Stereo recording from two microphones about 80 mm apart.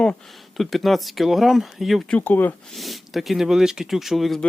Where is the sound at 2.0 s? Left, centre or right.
Centre.